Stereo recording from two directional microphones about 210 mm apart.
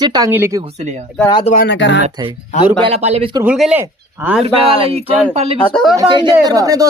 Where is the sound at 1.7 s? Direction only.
60° left (ahead or behind).